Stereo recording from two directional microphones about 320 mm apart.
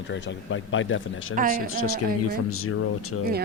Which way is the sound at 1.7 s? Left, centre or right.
Left.